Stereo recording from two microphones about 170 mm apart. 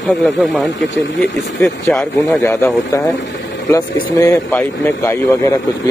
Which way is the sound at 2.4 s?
20° left (ahead or behind).